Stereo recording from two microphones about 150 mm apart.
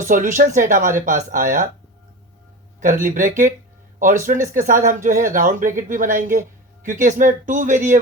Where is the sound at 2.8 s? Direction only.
65° right (ahead or behind).